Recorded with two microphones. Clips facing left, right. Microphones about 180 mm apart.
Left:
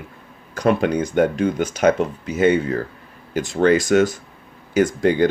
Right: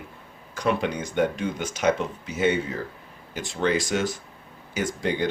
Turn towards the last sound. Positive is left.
turn(degrees=55)  # may be behind; listen again after turning